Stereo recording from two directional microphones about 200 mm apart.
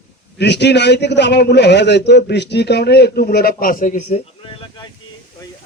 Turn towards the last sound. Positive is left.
turn(degrees=25)  # may be behind; listen again after turning